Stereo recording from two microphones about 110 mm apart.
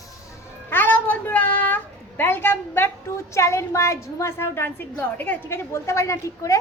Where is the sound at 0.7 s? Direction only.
20° left (ahead or behind).